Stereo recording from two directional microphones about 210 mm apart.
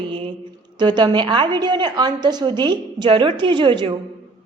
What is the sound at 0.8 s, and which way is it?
A woman's voice, 20° right (ahead or behind).